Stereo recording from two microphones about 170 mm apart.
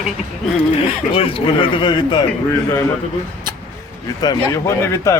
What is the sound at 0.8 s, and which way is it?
Speech, 35° left (ahead or behind).